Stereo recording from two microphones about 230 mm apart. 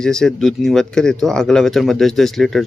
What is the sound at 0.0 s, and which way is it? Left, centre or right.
Speech, centre.